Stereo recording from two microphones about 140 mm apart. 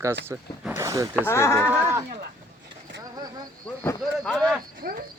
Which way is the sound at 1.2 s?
20° left (ahead or behind).